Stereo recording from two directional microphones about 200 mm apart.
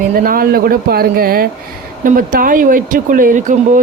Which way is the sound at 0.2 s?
45° right (ahead or behind).